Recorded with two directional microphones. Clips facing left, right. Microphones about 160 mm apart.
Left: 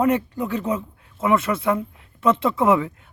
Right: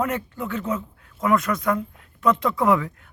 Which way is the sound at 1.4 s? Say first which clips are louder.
Left 1 dB; 25° left (ahead or behind).